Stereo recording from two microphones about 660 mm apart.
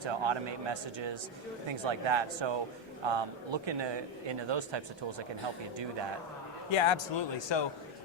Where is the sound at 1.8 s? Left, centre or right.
Right.